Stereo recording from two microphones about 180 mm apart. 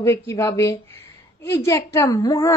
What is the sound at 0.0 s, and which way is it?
A woman's voice, 15° left (ahead or behind).